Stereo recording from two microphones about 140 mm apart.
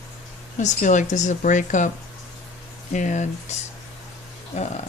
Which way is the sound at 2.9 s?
60° left (ahead or behind).